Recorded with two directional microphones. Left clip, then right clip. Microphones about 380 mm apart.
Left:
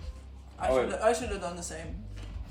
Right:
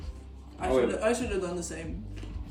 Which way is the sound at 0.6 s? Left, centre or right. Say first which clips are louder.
Even; centre.